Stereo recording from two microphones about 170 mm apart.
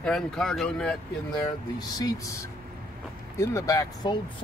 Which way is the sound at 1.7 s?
20° left (ahead or behind).